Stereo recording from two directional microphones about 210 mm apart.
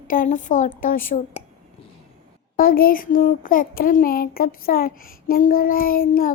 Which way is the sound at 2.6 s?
45° left (ahead or behind).